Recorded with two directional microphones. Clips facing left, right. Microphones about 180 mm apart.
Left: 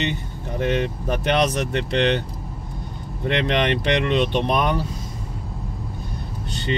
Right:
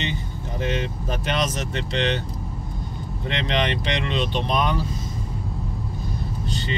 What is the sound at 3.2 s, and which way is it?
Speech, 55° left (ahead or behind).